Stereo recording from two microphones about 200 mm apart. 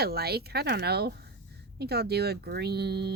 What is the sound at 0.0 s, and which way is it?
Speech, 50° right (ahead or behind).